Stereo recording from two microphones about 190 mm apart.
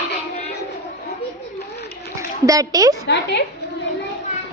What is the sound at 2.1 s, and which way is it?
Splash, 15° right (ahead or behind).